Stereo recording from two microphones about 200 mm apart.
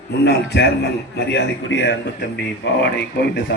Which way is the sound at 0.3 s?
60° left (ahead or behind).